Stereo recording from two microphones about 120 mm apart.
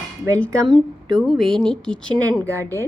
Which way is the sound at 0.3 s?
10° left (ahead or behind).